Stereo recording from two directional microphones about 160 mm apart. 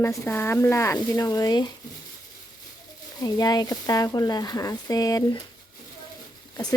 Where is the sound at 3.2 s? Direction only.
25° left (ahead or behind).